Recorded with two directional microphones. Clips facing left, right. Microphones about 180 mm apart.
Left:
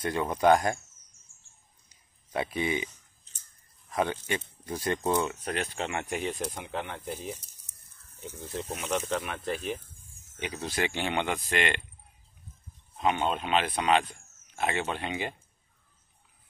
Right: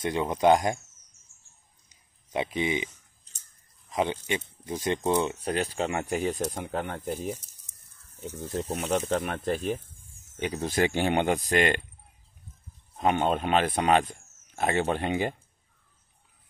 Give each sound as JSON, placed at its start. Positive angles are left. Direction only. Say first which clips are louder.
{"t": 0.0, "sound": "speech", "louder": "right 1 dB", "side_deg": -15}
{"t": 2.3, "sound": "speech", "louder": "right 2 dB", "side_deg": -20}
{"t": 3.9, "sound": "speech", "louder": "right 1 dB", "side_deg": -15}
{"t": 5.2, "sound": "speech", "louder": "right 3 dB", "side_deg": -30}
{"t": 8.4, "sound": "speech", "louder": "right 5 dB", "side_deg": -40}
{"t": 12.9, "sound": "a man's voice", "louder": "right 3 dB", "side_deg": -45}